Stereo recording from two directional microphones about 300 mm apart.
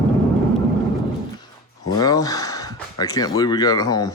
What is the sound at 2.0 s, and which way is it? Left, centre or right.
Speech, centre.